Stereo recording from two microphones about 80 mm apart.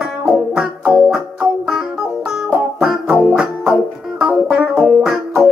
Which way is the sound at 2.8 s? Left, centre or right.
Centre.